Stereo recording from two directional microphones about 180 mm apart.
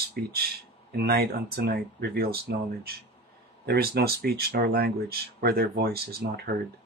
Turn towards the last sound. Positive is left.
turn(degrees=-60)  # may be behind; listen again after turning